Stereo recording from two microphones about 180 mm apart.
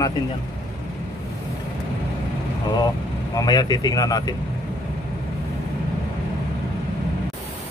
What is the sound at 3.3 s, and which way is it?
Speech, 20° left (ahead or behind).